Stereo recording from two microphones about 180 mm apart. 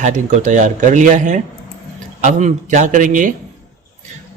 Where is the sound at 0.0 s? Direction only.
40° right (ahead or behind).